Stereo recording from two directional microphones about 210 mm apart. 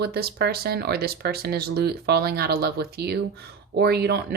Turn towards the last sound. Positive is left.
turn(degrees=-50)  # may be behind; listen again after turning